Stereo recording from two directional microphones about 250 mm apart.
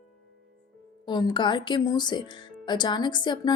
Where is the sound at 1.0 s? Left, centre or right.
Centre.